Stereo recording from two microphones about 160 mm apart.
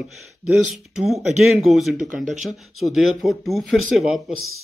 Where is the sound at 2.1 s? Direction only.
55° right (ahead or behind).